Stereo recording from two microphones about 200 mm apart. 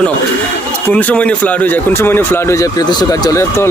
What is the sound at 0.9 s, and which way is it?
Speech, 5° left (ahead or behind).